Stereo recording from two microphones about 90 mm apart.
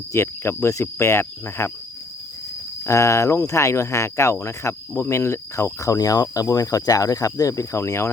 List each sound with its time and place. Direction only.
0.1 s speech: 30° left (ahead or behind)
2.8 s speech: 30° left (ahead or behind)